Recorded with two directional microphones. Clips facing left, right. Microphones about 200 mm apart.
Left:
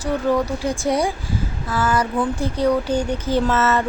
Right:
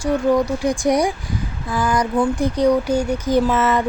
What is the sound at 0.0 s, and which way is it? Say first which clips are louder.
Speech: right 3 dB; 10° right (ahead or behind).